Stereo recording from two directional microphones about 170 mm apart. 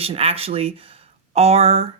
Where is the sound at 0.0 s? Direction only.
35° right (ahead or behind).